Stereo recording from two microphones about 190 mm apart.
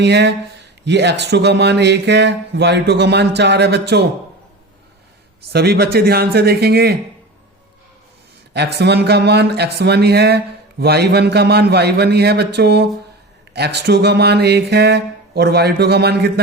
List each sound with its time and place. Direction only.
0.0 s speech: 65° right (ahead or behind)
5.5 s speech: 55° right (ahead or behind)
8.5 s speech: 60° right (ahead or behind)